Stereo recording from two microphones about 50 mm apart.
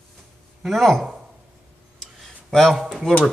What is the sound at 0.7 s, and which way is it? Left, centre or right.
Speech, centre.